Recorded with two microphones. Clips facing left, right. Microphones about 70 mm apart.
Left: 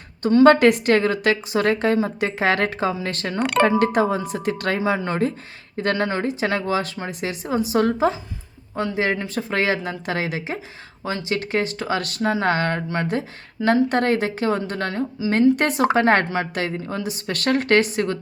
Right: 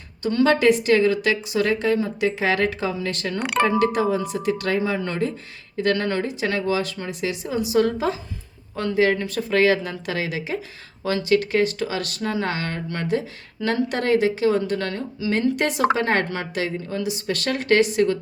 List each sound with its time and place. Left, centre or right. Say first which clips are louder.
0.4 s a woman's voice: left 3 dB; left
3.4 s speech: left 3 dB; centre
3.8 s a woman's voice: left 1 dB; left
4.9 s a woman's voice: left 3 dB; left
9.2 s a woman's voice: right 3 dB; left
11.0 s speech: right 5 dB; left
11.9 s a woman's voice: left 3 dB; left